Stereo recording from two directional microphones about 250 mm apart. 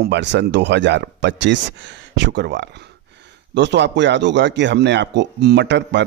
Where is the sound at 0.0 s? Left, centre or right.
Right.